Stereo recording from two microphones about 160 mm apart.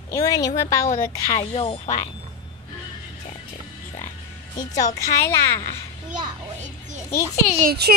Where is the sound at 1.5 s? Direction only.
35° left (ahead or behind).